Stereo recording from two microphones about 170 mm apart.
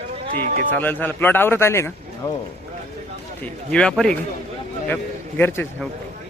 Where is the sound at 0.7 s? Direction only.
10° left (ahead or behind).